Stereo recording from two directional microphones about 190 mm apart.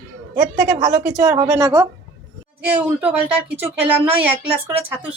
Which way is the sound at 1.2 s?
20° right (ahead or behind).